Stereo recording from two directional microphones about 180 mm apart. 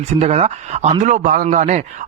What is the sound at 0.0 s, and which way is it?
A man's voice, 35° right (ahead or behind).